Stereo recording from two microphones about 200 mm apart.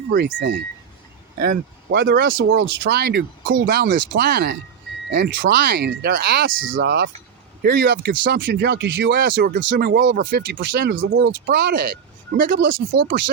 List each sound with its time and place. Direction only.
0.1 s speech: 60° right (ahead or behind)
1.4 s speech: 50° right (ahead or behind)